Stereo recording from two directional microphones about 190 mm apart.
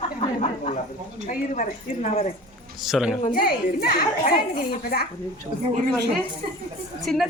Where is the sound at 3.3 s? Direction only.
50° left (ahead or behind).